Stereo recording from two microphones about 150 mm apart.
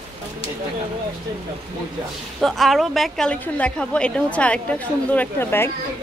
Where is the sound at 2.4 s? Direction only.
Centre (ahead or behind).